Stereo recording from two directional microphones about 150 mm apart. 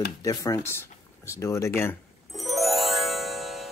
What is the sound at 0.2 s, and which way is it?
Speech, 25° left (ahead or behind).